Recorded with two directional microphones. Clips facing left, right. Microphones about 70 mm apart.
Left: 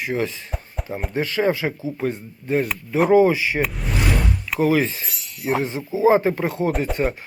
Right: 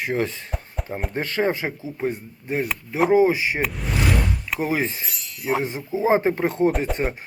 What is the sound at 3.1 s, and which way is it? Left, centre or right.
Speech, right.